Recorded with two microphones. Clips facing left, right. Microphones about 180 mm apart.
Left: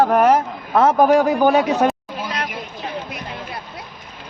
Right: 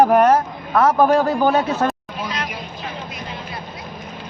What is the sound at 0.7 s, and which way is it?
A man's voice, 25° left (ahead or behind).